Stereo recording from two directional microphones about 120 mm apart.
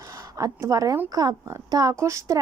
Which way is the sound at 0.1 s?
30° right (ahead or behind).